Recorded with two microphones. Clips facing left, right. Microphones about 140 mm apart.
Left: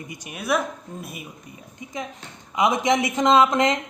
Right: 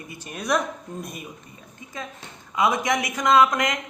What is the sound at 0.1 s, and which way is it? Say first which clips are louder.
Speech: even; 10° left (ahead or behind).